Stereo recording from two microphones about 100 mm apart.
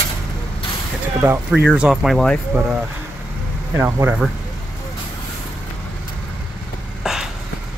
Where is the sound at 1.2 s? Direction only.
15° right (ahead or behind); by 2.4 s centre (ahead or behind).